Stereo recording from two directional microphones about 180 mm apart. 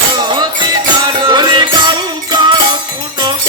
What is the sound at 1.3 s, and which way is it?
Music, 25° right (ahead or behind).